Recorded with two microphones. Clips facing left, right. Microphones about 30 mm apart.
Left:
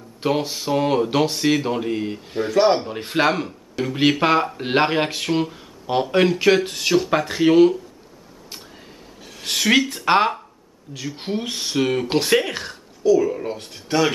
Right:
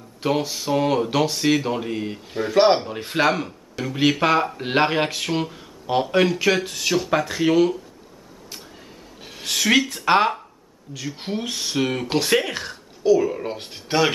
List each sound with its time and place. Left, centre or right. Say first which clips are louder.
0.2 s speech: left 1 dB; centre
2.5 s speech: right 1 dB; right
2.8 s speech: left 1 dB; centre
9.4 s speech: left 1 dB; centre
13.1 s speech: left 1 dB; centre